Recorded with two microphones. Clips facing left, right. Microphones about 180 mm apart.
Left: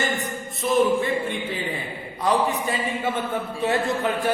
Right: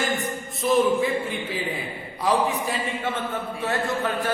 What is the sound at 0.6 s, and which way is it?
Speech, centre (ahead or behind).